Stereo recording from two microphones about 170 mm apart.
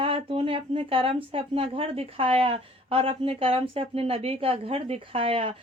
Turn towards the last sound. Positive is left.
turn(degrees=-30)  # may be behind; listen again after turning